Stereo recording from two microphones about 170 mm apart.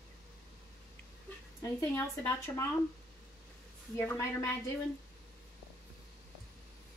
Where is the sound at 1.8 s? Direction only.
15° left (ahead or behind).